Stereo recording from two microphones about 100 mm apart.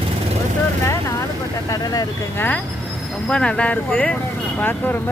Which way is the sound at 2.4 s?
15° left (ahead or behind).